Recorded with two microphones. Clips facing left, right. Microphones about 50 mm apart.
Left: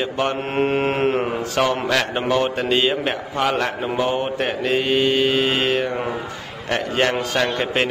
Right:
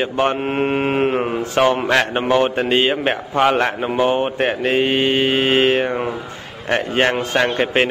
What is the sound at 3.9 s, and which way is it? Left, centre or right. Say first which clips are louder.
Mantra: right 4 dB; right.